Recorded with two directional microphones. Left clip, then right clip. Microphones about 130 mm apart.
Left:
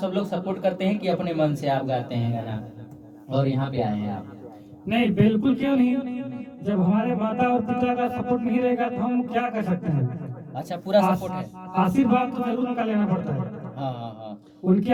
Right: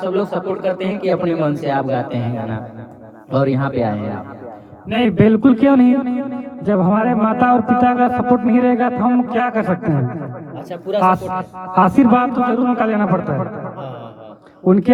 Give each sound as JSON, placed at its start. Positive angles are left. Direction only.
{"t": 0.1, "sound": "speech", "side_deg": -30}
{"t": 1.1, "sound": "speech", "side_deg": -25}
{"t": 3.3, "sound": "speech", "side_deg": -20}
{"t": 10.7, "sound": "speech", "side_deg": -30}
{"t": 11.1, "sound": "a man's voice", "side_deg": -20}